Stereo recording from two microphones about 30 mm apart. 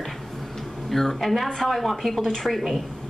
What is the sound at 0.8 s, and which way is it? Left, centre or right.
Speech, centre.